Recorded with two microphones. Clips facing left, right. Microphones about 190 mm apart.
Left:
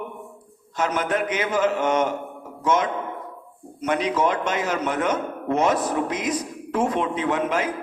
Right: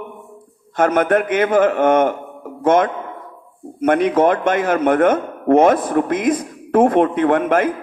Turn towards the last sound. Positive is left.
turn(degrees=-55)  # may be behind; listen again after turning